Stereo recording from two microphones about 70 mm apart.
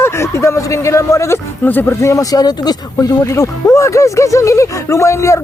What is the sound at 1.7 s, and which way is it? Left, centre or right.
Speech, left.